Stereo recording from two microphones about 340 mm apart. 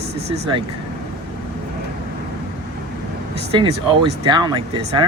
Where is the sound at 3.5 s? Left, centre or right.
Centre.